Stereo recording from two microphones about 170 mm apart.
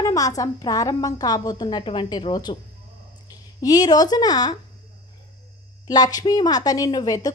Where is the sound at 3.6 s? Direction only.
25° left (ahead or behind).